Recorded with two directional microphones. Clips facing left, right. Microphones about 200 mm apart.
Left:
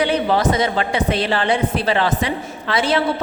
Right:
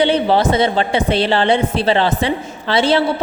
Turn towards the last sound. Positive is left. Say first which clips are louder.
# right 4 dB
turn(degrees=-30)  # may be behind; listen again after turning